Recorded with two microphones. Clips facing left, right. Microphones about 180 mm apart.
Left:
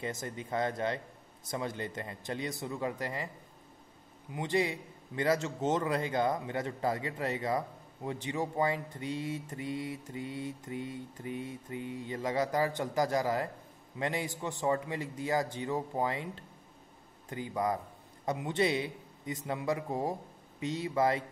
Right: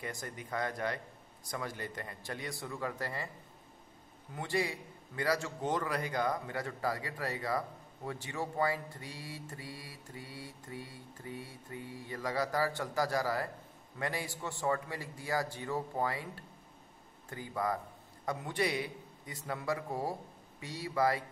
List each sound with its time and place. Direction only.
0.0 s a man's voice: 25° left (ahead or behind)
4.3 s a man's voice: 20° left (ahead or behind)